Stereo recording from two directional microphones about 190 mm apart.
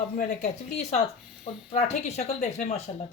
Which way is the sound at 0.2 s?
40° left (ahead or behind).